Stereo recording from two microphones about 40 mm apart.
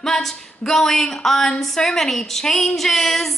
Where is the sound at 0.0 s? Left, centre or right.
Centre.